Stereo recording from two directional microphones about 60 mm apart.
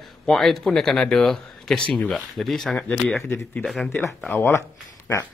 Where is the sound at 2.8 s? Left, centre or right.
Centre.